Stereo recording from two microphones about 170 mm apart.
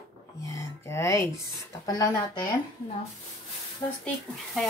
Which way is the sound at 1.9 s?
25° left (ahead or behind).